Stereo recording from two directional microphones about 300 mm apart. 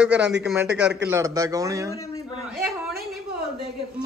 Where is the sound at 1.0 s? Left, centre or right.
Centre.